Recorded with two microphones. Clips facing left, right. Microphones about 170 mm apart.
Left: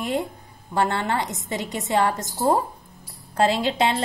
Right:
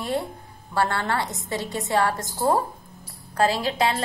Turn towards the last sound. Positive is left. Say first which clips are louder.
# left 2 dB
turn(degrees=25)  # may be behind; listen again after turning